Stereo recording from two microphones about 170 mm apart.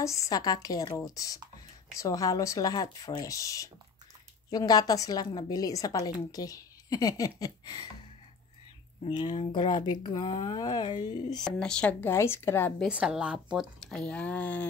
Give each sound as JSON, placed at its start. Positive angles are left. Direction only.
{"t": 0.0, "sound": "a woman's voice", "side_deg": 20}
{"t": 9.0, "sound": "a woman's voice", "side_deg": 25}
{"t": 11.4, "sound": "speech", "side_deg": 5}
{"t": 12.8, "sound": "speech", "side_deg": -5}